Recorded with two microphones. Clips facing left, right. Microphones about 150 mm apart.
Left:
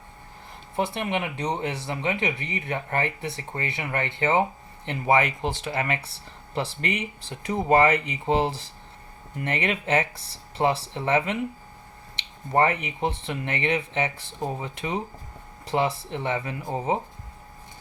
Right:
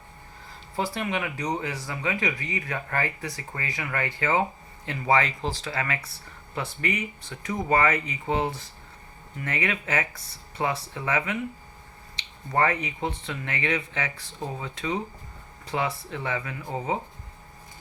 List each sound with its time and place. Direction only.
0.8 s speech: 20° left (ahead or behind)